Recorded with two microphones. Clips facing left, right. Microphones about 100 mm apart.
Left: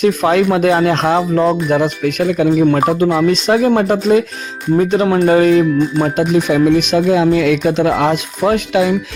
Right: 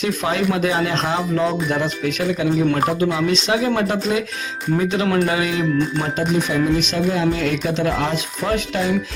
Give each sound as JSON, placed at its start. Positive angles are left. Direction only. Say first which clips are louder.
{"t": 0.0, "sound": "speech", "louder": "left 8 dB", "side_deg": 55}
{"t": 6.1, "sound": "speech", "louder": "left 6 dB", "side_deg": 65}